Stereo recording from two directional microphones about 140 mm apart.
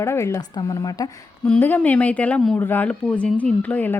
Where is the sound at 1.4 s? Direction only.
10° left (ahead or behind).